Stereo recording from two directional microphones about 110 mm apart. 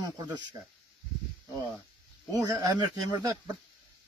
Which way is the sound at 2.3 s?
35° right (ahead or behind).